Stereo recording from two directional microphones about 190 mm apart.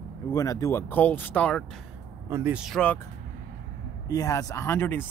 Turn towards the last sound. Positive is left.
turn(degrees=10)  # may be behind; listen again after turning